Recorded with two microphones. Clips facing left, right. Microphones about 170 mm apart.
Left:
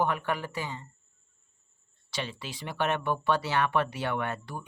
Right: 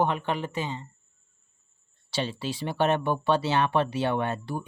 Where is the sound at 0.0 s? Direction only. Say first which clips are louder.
Right 3 dB; 20° right (ahead or behind).